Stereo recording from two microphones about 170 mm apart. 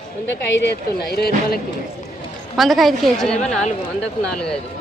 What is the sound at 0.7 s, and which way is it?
Speech, 70° left (ahead or behind).